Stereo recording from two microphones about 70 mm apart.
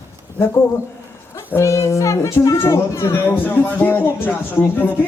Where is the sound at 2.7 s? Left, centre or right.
Left.